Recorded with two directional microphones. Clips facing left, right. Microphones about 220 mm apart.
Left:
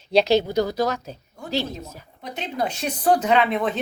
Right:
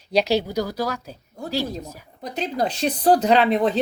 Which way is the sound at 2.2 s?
35° right (ahead or behind).